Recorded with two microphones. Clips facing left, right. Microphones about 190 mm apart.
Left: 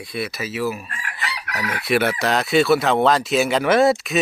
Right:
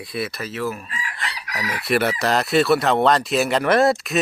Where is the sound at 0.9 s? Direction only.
55° left (ahead or behind).